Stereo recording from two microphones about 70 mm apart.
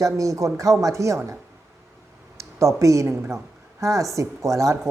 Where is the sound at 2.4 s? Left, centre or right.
Right.